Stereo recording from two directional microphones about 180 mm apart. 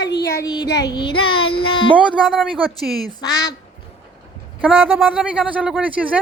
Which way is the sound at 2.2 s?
Centre (ahead or behind).